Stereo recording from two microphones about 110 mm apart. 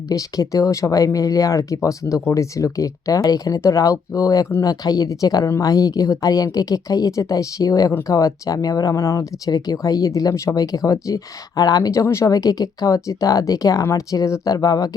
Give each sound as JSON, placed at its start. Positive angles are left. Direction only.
{"t": 0.1, "sound": "speech", "side_deg": 30}